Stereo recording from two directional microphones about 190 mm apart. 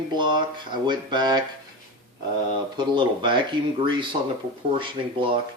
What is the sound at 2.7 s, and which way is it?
Speech, 25° right (ahead or behind).